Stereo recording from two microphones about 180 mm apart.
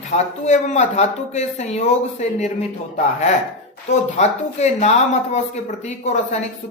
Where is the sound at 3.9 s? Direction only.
40° left (ahead or behind).